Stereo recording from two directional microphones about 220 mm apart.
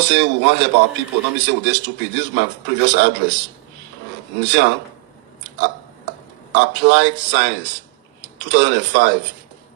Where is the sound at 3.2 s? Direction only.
50° right (ahead or behind).